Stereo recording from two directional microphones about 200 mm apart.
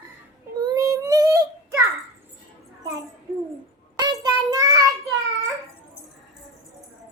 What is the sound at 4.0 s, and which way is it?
Child singing, 20° right (ahead or behind).